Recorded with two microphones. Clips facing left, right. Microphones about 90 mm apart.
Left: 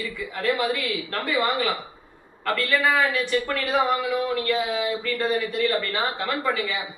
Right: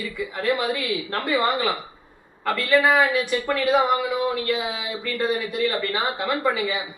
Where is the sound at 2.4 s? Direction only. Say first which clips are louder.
Right 3 dB; 15° right (ahead or behind).